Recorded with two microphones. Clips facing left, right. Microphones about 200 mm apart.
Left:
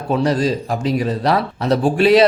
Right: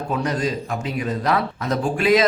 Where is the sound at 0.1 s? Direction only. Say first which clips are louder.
Left 7 dB; 30° left (ahead or behind).